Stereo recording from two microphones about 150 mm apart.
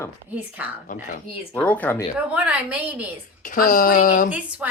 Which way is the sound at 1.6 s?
10° left (ahead or behind).